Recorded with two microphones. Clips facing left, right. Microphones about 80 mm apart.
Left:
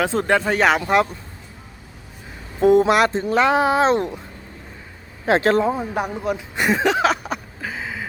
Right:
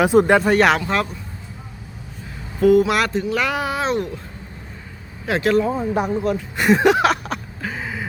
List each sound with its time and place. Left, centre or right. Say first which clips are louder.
0.0 s speech: right 5 dB; centre
0.8 s speech: left 4 dB; centre
2.6 s speech: left 1 dB; left
5.2 s speech: left 1 dB; left
5.6 s speech: right 1 dB; centre
6.7 s a sound: right 2 dB; centre